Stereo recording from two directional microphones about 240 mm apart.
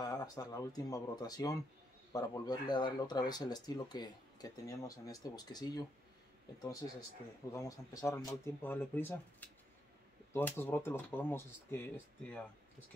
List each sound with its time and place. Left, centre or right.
0.0 s speech: centre
9.4 s a sound: centre
10.3 s speech: centre